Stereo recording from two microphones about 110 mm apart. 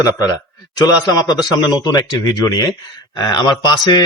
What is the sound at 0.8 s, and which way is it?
A man's voice, 35° left (ahead or behind).